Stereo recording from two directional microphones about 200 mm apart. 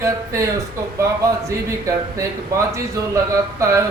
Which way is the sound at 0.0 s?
15° right (ahead or behind).